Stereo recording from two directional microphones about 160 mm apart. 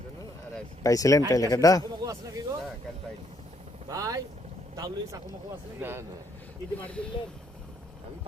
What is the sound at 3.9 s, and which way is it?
Speech, 20° right (ahead or behind).